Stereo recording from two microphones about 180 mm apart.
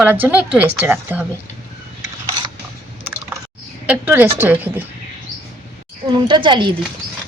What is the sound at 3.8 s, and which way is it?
Speech, 10° right (ahead or behind).